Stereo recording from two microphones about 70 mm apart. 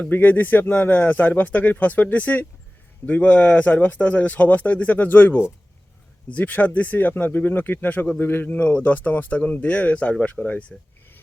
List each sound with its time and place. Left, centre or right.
0.1 s speech: left